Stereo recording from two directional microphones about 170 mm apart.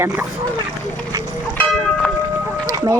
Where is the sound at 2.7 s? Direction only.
25° right (ahead or behind).